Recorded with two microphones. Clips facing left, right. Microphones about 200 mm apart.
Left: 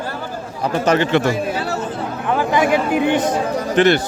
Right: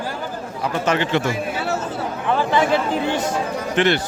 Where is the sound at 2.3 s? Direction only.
15° left (ahead or behind).